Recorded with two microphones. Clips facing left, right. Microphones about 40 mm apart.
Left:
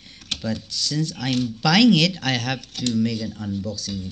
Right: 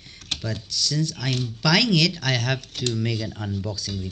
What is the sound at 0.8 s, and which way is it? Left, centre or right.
Speech, left.